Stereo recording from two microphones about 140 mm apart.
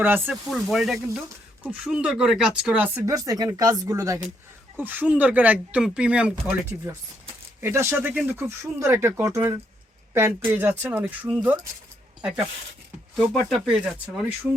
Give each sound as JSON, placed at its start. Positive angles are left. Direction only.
{"t": 0.0, "sound": "speech", "side_deg": -15}
{"t": 0.5, "sound": "speech", "side_deg": 0}
{"t": 3.2, "sound": "speech", "side_deg": -25}
{"t": 4.8, "sound": "speech", "side_deg": -10}
{"t": 13.1, "sound": "speech", "side_deg": 0}